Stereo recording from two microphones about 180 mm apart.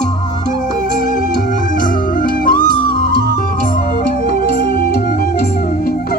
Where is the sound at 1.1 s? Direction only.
45° left (ahead or behind).